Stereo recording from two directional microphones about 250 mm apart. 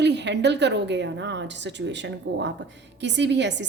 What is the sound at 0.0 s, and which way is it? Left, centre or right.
A woman's voice, right.